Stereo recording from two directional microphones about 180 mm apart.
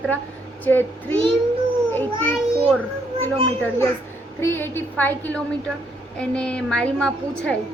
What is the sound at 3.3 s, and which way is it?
Speech, 30° right (ahead or behind).